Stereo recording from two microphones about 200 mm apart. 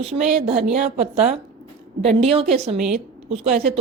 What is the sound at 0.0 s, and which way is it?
Speech, 30° right (ahead or behind).